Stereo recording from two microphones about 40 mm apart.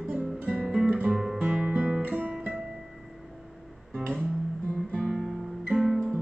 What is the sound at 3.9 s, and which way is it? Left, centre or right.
Music, left.